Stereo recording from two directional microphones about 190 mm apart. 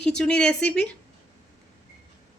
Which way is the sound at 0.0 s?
5° left (ahead or behind).